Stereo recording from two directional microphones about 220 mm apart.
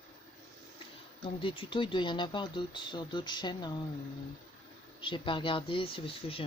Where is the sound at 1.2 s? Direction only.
25° left (ahead or behind).